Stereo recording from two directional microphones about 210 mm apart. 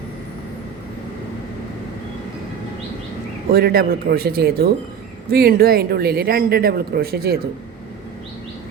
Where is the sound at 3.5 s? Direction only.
50° right (ahead or behind).